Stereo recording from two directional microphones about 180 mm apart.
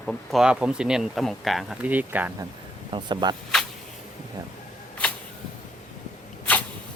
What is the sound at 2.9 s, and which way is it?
Speech, 25° right (ahead or behind).